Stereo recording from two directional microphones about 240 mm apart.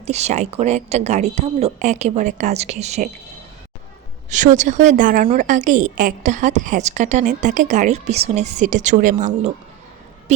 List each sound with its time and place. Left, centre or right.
0.0 s a woman's voice: right
4.3 s a woman's voice: right